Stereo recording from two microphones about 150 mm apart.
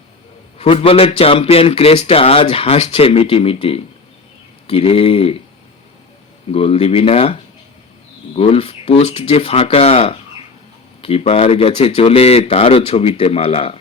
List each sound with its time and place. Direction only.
0.6 s speech: 40° left (ahead or behind)
6.5 s speech: 40° left (ahead or behind)
8.4 s speech: 40° left (ahead or behind)